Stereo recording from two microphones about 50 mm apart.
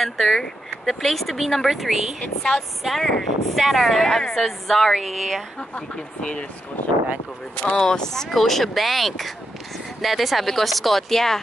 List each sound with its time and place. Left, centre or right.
0.0 s speech: centre
2.4 s speech: left
3.0 s speech: centre
5.6 s speech: left
7.5 s speech: centre